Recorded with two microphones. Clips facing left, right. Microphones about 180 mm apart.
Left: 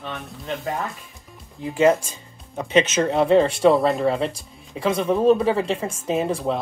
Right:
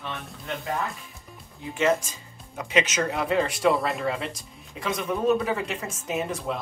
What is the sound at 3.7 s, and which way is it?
Speech, centre (ahead or behind).